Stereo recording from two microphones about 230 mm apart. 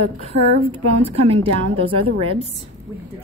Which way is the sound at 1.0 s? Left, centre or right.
Right.